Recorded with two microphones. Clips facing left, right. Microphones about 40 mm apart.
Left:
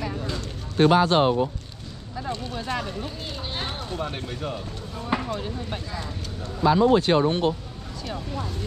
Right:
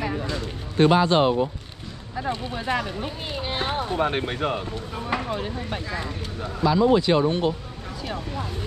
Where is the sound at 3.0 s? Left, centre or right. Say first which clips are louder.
Right 3 dB; right.